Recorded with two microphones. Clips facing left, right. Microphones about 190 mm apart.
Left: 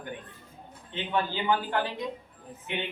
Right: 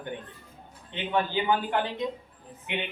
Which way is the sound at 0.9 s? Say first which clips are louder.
Right 2 dB; 15° right (ahead or behind).